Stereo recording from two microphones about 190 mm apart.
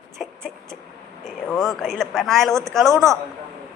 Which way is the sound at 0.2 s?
5° right (ahead or behind).